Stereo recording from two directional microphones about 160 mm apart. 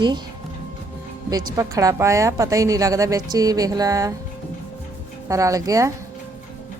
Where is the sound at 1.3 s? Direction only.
20° right (ahead or behind).